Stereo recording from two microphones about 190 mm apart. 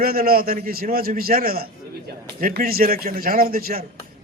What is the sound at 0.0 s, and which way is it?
A man's voice, 50° right (ahead or behind).